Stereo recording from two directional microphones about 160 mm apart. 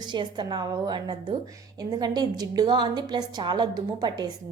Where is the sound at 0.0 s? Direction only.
30° right (ahead or behind).